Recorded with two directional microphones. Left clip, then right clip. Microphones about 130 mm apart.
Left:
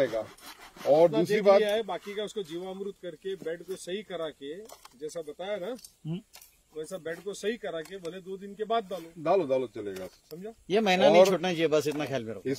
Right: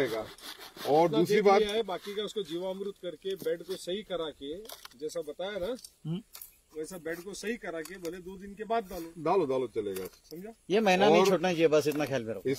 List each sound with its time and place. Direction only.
0.9 s speech: 20° left (ahead or behind)
1.6 s speech: centre (ahead or behind)
6.8 s speech: 10° left (ahead or behind)
10.7 s speech: 40° left (ahead or behind)